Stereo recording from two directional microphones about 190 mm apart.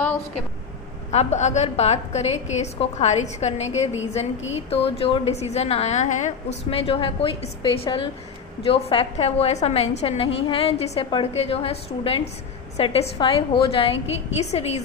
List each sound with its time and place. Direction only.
1.1 s a woman's voice: 35° left (ahead or behind)